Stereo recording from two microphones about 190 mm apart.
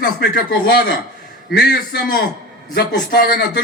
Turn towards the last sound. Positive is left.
turn(degrees=60)  # may be behind; listen again after turning